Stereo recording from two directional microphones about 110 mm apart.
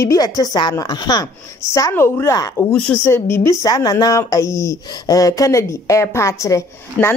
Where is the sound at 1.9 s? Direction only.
25° left (ahead or behind).